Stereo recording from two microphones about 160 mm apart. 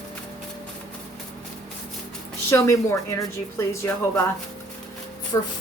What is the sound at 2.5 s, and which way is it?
A woman's voice, 15° left (ahead or behind).